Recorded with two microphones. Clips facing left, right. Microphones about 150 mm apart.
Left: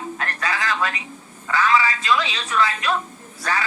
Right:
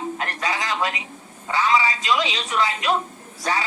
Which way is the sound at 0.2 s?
20° right (ahead or behind).